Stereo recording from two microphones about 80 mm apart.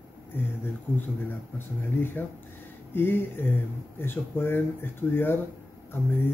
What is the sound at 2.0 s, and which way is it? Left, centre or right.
Speech, left.